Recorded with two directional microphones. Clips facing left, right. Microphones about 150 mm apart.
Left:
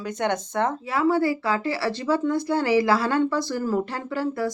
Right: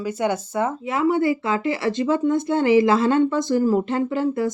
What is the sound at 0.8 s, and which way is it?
Speech, 20° right (ahead or behind).